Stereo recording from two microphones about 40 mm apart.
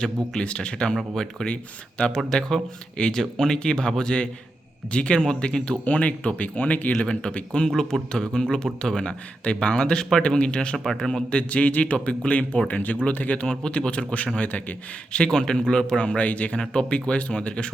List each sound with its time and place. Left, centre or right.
0.0 s a man's voice: left
5.8 s speech: left
7.0 s speech: left
7.9 s a man's voice: centre
8.3 s a man's voice: centre
9.0 s speech: left
10.9 s a man's voice: centre
11.3 s speech: left
15.1 s speech: left
16.0 s speech: left